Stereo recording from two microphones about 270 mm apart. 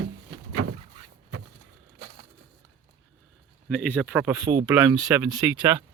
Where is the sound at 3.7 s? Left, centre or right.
Centre.